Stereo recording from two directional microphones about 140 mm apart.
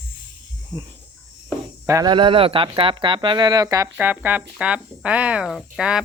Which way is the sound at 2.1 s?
35° right (ahead or behind).